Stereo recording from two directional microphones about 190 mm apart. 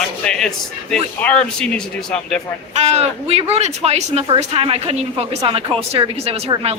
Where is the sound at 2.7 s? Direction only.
35° right (ahead or behind).